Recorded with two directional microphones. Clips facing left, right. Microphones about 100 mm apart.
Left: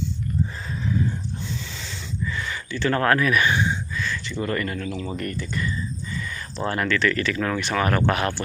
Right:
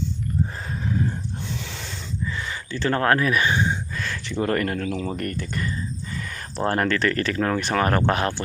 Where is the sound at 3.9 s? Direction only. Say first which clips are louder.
Right 1 dB; 55° right (ahead or behind).